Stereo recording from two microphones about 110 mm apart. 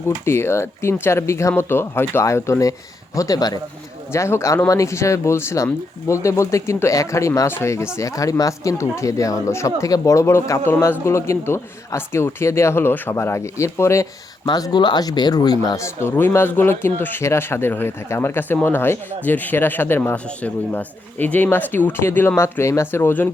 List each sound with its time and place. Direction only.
0.3 s speech: 25° left (ahead or behind)
4.1 s speech: 25° left (ahead or behind)
14.4 s speech: 40° left (ahead or behind); by 23.3 s 20° left (ahead or behind)